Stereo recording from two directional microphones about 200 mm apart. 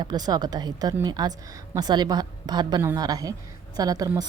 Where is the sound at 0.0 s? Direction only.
20° right (ahead or behind).